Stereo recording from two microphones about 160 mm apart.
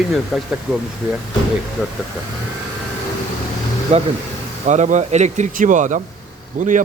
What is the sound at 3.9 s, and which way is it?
Speech, 40° right (ahead or behind).